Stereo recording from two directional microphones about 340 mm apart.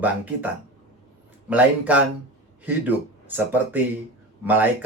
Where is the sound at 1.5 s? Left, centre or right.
Centre.